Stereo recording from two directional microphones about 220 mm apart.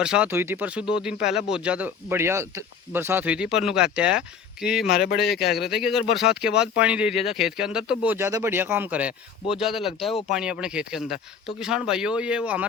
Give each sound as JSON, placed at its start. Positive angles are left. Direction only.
{"t": 0.0, "sound": "speech", "side_deg": -5}
{"t": 4.9, "sound": "speech", "side_deg": 45}
{"t": 5.6, "sound": "speech", "side_deg": 0}
{"t": 10.1, "sound": "speech", "side_deg": 25}
{"t": 10.3, "sound": "speech", "side_deg": -5}